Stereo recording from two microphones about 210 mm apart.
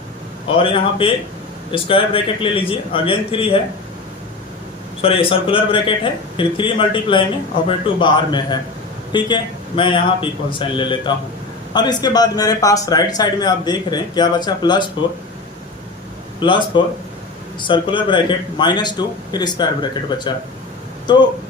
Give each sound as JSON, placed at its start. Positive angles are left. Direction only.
{"t": 0.5, "sound": "speech", "side_deg": 25}
{"t": 5.0, "sound": "speech", "side_deg": 25}
{"t": 16.4, "sound": "speech", "side_deg": 25}